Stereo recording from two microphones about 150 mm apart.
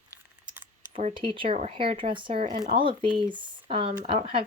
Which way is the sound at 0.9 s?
40° right (ahead or behind).